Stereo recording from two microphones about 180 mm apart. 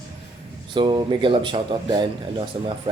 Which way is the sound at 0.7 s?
25° right (ahead or behind).